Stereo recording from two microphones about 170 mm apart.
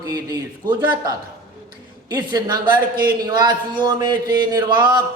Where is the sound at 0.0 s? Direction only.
20° right (ahead or behind).